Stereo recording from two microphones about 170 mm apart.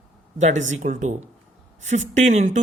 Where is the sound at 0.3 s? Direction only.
45° right (ahead or behind).